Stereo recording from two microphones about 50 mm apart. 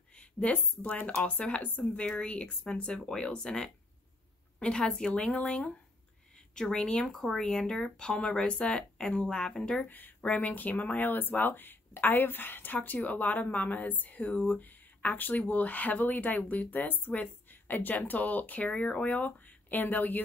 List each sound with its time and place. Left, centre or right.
0.5 s speech: left
9.8 s speech: left
19.0 s speech: left